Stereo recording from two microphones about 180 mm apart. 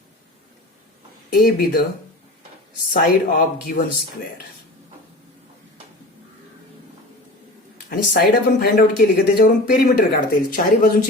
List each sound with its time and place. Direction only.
1.3 s speech: 55° left (ahead or behind)
2.9 s speech: 55° left (ahead or behind)
7.9 s speech: 55° left (ahead or behind)